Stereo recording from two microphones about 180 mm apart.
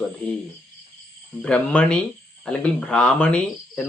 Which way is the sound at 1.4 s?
5° left (ahead or behind).